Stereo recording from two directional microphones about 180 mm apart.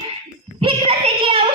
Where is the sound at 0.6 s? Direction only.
30° right (ahead or behind).